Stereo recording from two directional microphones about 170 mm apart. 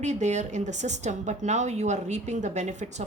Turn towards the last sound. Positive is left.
turn(degrees=-45)  # may be behind; listen again after turning